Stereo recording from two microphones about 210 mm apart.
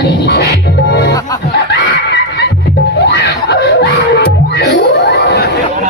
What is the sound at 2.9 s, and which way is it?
Screaming, 55° left (ahead or behind).